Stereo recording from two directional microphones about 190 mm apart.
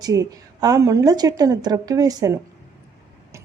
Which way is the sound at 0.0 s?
20° right (ahead or behind).